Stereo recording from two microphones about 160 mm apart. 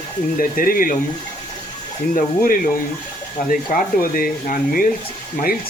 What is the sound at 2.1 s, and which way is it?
Speech, 60° left (ahead or behind).